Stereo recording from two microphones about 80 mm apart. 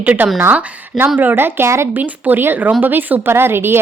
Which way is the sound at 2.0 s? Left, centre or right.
Right.